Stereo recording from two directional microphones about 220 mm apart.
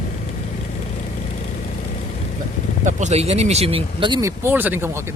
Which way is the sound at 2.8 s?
30° right (ahead or behind).